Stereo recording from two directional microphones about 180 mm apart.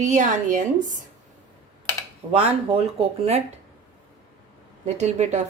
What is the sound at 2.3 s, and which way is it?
Speech, 35° right (ahead or behind).